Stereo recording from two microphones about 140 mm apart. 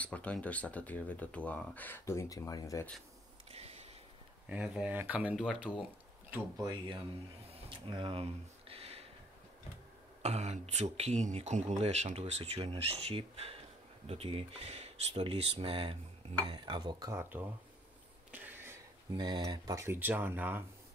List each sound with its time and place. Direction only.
0.0 s speech: 10° left (ahead or behind)
3.5 s a sound: 50° right (ahead or behind)
4.5 s speech: 10° right (ahead or behind)
6.5 s speech: 30° right (ahead or behind)
7.5 s a sound: 35° right (ahead or behind)
10.2 s speech: 50° right (ahead or behind); by 17.2 s 30° right (ahead or behind)
17.2 s speech: 15° right (ahead or behind)
18.3 s a sound: 15° right (ahead or behind)
19.1 s speech: 30° right (ahead or behind); by 20.6 s 15° right (ahead or behind)